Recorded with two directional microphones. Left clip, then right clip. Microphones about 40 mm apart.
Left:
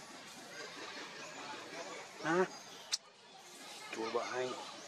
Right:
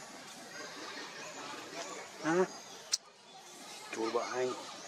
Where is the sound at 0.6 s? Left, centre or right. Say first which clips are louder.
Right 2 dB; centre.